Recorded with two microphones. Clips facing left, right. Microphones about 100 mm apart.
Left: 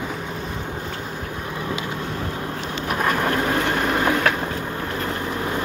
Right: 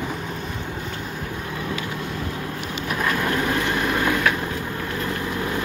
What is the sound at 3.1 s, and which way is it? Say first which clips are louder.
Vehicle: left 2 dB; 35° left (ahead or behind).